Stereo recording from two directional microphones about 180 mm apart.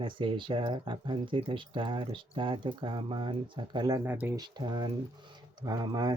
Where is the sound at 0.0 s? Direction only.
30° right (ahead or behind); by 4.4 s 10° right (ahead or behind).